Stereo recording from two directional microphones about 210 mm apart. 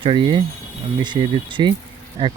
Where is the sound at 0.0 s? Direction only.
25° right (ahead or behind).